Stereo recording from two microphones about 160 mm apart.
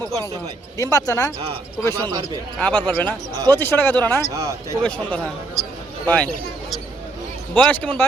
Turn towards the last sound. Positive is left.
turn(degrees=10)  # may be behind; listen again after turning